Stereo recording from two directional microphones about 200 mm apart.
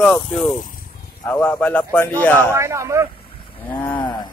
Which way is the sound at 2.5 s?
15° right (ahead or behind).